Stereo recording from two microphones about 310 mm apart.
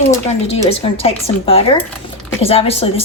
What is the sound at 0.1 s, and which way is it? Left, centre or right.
A woman's voice, left.